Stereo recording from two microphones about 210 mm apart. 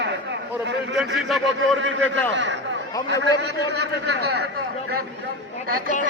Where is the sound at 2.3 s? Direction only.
60° right (ahead or behind).